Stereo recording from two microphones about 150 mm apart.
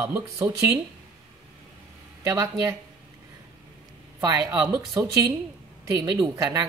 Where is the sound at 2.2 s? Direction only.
20° right (ahead or behind).